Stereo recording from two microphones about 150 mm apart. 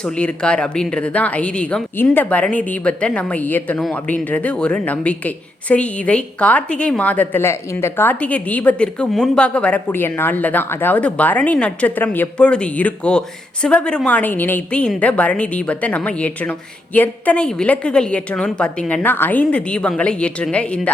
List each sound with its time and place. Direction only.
0.0 s a woman's voice: 5° left (ahead or behind)